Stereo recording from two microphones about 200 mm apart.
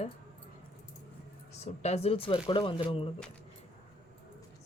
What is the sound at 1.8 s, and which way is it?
Speech, 30° left (ahead or behind).